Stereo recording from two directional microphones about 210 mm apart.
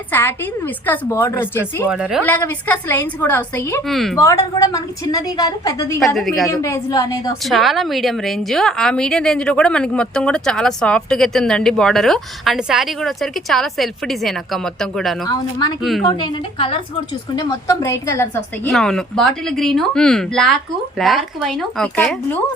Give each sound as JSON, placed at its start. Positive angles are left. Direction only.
{"t": 0.1, "sound": "a woman's voice", "side_deg": 10}
{"t": 1.9, "sound": "a woman's voice", "side_deg": -5}
{"t": 2.2, "sound": "a woman's voice", "side_deg": 10}
{"t": 3.8, "sound": "a woman's voice", "side_deg": 0}
{"t": 4.2, "sound": "a woman's voice", "side_deg": 15}
{"t": 6.1, "sound": "a woman's voice", "side_deg": 0}
{"t": 6.5, "sound": "a woman's voice", "side_deg": 15}
{"t": 7.4, "sound": "a woman's voice", "side_deg": 0}
{"t": 15.3, "sound": "a woman's voice", "side_deg": 20}
{"t": 15.8, "sound": "a woman's voice", "side_deg": 0}
{"t": 16.0, "sound": "a woman's voice", "side_deg": 20}
{"t": 18.7, "sound": "a woman's voice", "side_deg": 5}